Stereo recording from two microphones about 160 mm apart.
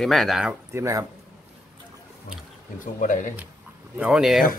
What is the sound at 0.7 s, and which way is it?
Speech, 20° right (ahead or behind).